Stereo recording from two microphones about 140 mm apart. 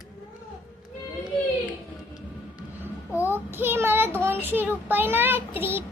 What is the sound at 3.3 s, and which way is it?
Child singing, 15° right (ahead or behind).